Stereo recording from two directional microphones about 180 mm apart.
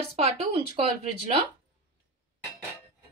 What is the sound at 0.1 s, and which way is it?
Speech, 35° right (ahead or behind).